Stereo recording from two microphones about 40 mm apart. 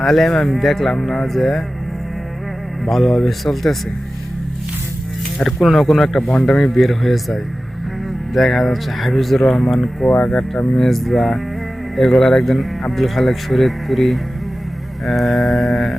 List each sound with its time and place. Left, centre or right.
0.0 s speech: centre
2.8 s speech: centre
5.4 s speech: centre
6.7 s speech: centre
10.8 s speech: centre